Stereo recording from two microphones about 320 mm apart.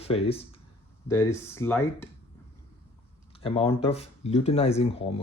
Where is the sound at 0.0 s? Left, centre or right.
Centre.